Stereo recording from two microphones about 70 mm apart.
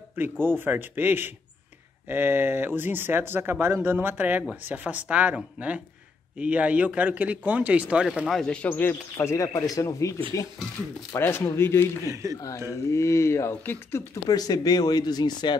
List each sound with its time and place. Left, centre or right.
0.1 s a man's voice: right
8.3 s speech: centre
8.6 s speech: left
9.1 s speech: left
11.1 s speech: left
12.1 s speech: right
12.4 s speech: left
14.2 s speech: left